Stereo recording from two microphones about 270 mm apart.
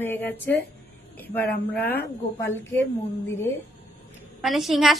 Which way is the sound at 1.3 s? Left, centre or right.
Left.